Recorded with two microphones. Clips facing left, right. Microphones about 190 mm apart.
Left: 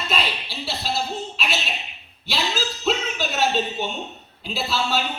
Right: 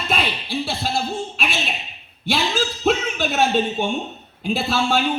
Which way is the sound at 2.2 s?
50° right (ahead or behind).